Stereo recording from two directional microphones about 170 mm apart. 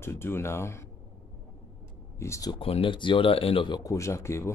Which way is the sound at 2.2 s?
20° left (ahead or behind).